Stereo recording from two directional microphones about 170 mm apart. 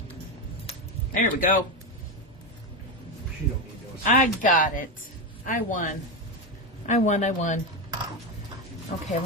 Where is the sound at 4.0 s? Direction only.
50° left (ahead or behind).